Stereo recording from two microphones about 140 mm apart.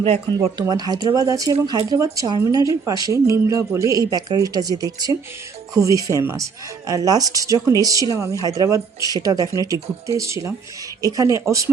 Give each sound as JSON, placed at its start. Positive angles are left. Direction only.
{"t": 0.0, "sound": "speech", "side_deg": -45}
{"t": 0.6, "sound": "a woman's voice", "side_deg": -30}